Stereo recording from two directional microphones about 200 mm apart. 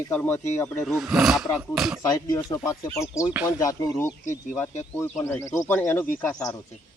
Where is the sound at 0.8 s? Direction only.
Centre (ahead or behind).